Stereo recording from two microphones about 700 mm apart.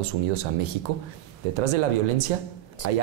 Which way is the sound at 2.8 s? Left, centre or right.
Right.